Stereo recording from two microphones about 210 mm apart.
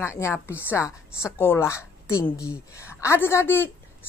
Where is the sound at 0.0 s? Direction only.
10° left (ahead or behind).